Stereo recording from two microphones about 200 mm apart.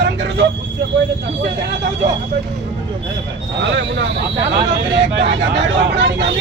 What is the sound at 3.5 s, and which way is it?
Speech, 60° right (ahead or behind).